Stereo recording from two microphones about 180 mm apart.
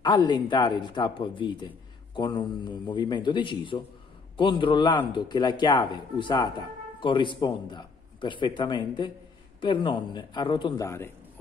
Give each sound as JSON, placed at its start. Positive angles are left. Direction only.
{"t": 0.0, "sound": "speech", "side_deg": 25}